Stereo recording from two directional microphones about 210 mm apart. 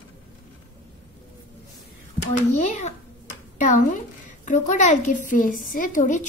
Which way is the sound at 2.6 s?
35° left (ahead or behind).